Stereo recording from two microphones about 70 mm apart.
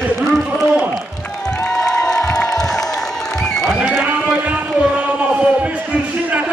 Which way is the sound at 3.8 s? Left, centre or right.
Right.